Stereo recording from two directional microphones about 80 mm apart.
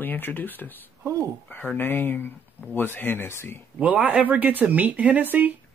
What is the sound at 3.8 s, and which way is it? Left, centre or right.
Speech, centre.